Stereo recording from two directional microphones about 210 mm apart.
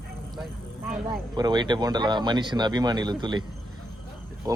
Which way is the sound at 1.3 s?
20° right (ahead or behind).